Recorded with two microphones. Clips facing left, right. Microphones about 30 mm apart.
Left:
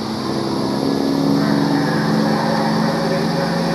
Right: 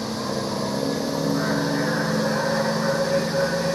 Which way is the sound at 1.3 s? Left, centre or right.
Left.